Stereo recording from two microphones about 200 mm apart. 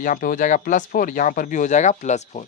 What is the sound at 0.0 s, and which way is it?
Speech, 45° left (ahead or behind).